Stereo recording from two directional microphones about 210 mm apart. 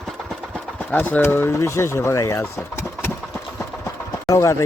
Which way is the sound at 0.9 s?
10° left (ahead or behind).